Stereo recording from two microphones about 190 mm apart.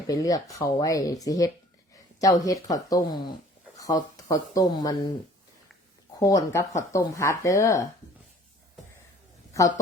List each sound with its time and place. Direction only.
0.1 s speech: 20° left (ahead or behind)
6.1 s speech: 20° left (ahead or behind)